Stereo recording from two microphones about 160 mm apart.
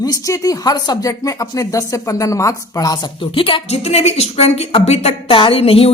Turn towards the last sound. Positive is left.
turn(degrees=35)  # may be behind; listen again after turning